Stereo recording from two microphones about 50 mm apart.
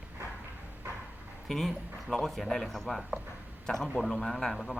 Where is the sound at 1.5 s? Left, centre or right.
Centre.